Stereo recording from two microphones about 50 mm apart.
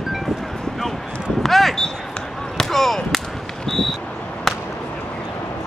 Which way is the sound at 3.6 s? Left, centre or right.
Centre.